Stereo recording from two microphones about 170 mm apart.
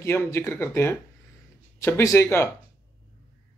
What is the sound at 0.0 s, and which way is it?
Speech, 15° left (ahead or behind).